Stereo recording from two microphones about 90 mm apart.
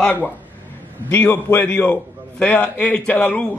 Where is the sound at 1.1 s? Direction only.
25° left (ahead or behind).